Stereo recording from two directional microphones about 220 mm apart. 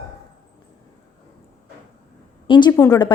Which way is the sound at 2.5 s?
20° left (ahead or behind).